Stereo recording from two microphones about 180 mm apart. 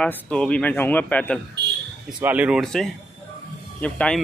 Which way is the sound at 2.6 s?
5° left (ahead or behind).